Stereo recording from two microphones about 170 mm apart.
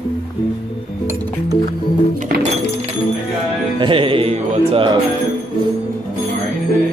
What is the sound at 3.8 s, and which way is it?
Speech, 30° right (ahead or behind).